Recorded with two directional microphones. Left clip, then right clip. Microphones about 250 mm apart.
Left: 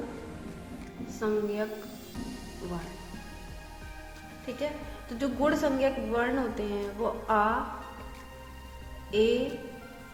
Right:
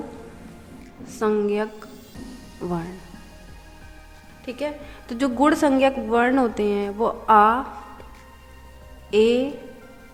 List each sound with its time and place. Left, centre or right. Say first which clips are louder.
1.0 s a woman's voice: right 8 dB; right
1.9 s music: right 1 dB; centre
4.4 s a woman's voice: right 5 dB; right
9.0 s a woman's voice: right 8 dB; right